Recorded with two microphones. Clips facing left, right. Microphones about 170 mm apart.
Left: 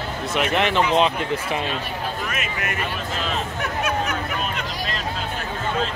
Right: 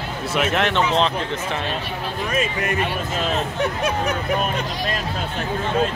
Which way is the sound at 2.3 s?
30° right (ahead or behind).